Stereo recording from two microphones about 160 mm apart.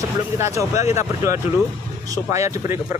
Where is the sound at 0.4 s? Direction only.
20° right (ahead or behind).